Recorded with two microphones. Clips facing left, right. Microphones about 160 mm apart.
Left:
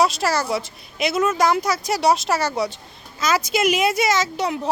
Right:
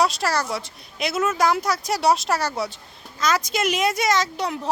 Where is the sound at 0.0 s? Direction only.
Centre (ahead or behind).